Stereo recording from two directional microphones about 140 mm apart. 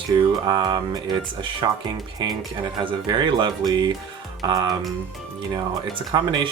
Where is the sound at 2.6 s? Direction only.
35° right (ahead or behind).